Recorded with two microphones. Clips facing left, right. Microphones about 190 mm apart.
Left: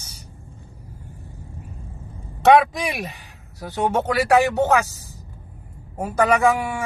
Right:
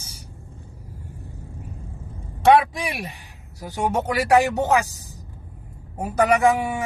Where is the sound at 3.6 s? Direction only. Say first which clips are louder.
Left 2 dB; 10° right (ahead or behind).